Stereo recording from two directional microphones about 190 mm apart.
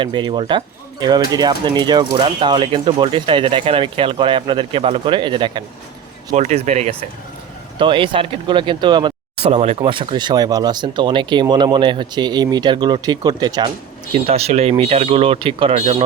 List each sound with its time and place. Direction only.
0.0 s speech: 25° right (ahead or behind)
6.3 s speech: 35° right (ahead or behind); by 13.7 s 20° right (ahead or behind)
14.1 s speech: 30° right (ahead or behind)